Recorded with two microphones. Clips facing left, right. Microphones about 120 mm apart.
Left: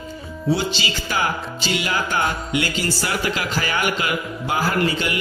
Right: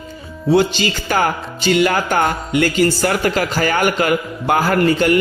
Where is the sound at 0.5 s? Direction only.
55° right (ahead or behind).